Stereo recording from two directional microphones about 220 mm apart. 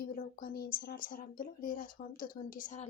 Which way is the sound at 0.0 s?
40° left (ahead or behind).